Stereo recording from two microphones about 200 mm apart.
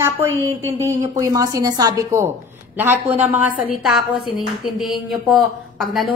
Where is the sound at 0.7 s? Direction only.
15° right (ahead or behind).